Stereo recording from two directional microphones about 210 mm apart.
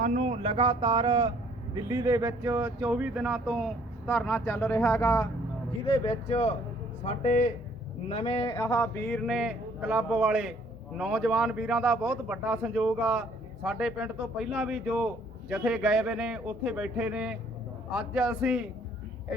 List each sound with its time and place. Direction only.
0.0 s speech: 35° right (ahead or behind); by 5.3 s 10° left (ahead or behind)
5.8 s speech: 25° left (ahead or behind)
8.5 s speech: 15° left (ahead or behind); by 18.6 s 5° right (ahead or behind)